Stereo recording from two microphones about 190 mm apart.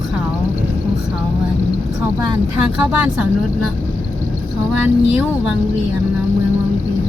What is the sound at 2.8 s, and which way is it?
Speech, 5° right (ahead or behind).